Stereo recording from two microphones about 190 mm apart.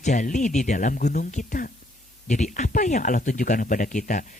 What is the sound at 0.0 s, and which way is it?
A man's voice, 40° left (ahead or behind).